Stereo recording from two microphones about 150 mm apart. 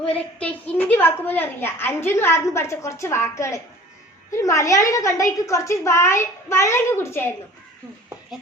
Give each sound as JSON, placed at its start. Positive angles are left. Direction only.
{"t": 0.0, "sound": "a woman's voice", "side_deg": 10}